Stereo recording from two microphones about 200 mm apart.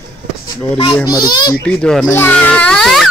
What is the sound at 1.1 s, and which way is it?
Speech, 20° left (ahead or behind).